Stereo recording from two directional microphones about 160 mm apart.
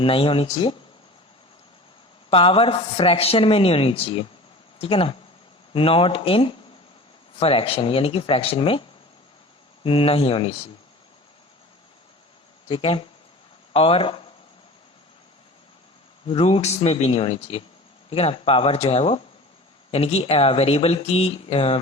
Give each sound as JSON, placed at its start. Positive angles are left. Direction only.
{"t": 0.0, "sound": "a man's voice", "side_deg": 35}
{"t": 2.3, "sound": "a man's voice", "side_deg": 35}
{"t": 9.8, "sound": "a man's voice", "side_deg": 35}
{"t": 12.6, "sound": "a man's voice", "side_deg": 30}
{"t": 16.2, "sound": "a man's voice", "side_deg": 35}